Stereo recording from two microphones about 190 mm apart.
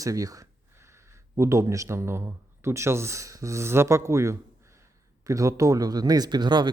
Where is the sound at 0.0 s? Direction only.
20° right (ahead or behind).